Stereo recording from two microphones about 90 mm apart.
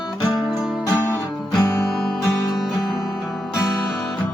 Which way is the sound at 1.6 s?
40° left (ahead or behind).